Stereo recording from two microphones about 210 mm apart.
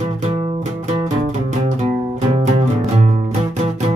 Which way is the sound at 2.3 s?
30° right (ahead or behind).